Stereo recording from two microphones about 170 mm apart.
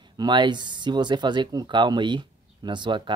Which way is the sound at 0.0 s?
25° right (ahead or behind).